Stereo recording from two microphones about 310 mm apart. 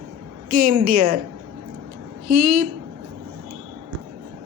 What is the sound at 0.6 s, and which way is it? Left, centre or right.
Speech, right.